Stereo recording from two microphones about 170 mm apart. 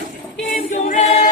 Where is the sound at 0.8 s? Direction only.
40° left (ahead or behind).